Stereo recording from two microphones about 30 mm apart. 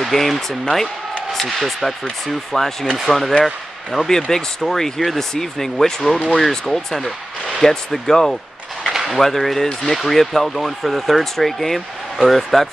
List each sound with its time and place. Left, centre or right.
0.0 s speech: centre
4.6 s speech: centre
7.6 s speech: centre